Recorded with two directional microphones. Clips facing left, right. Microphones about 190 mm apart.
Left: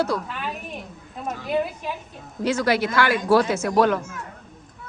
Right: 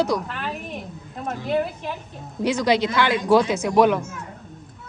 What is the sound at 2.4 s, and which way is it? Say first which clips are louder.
A woman's voice: right 1 dB; 15° right (ahead or behind).